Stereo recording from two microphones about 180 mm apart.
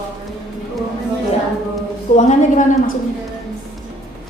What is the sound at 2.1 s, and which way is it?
Speech, 45° left (ahead or behind).